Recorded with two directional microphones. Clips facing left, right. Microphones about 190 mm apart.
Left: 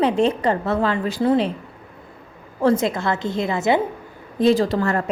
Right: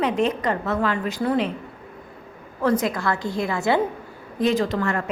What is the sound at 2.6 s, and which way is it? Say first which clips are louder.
A woman's voice: left 3 dB; 25° left (ahead or behind).